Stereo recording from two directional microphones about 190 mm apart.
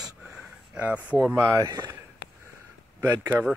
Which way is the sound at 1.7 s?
20° right (ahead or behind).